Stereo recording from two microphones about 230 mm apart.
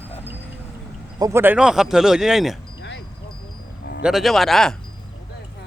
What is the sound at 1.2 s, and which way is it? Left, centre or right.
Speech, centre.